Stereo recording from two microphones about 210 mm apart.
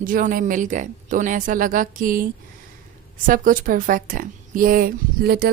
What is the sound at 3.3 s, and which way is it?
A woman's voice, 40° right (ahead or behind).